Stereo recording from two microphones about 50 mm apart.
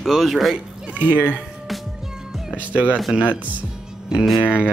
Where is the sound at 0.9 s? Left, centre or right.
Right.